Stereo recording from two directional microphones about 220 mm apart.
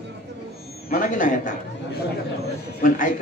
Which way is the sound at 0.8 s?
35° left (ahead or behind).